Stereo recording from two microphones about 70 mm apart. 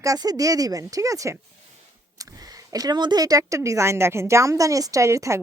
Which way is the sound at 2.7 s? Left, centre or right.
Right.